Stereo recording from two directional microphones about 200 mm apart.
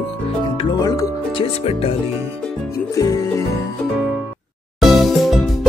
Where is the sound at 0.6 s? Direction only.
20° left (ahead or behind).